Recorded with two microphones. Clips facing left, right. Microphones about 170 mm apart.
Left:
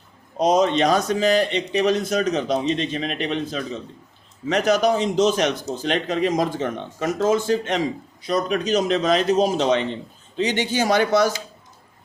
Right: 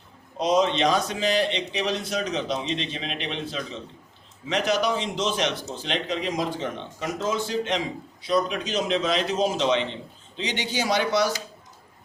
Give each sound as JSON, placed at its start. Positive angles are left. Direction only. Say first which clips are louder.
{"t": 0.3, "sound": "speech", "louder": "left 4 dB", "side_deg": 45}